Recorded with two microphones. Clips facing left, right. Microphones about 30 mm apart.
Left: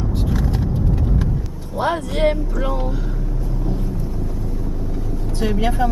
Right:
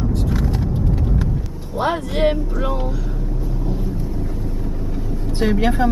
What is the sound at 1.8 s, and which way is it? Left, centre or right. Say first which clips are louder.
Speech: even; centre.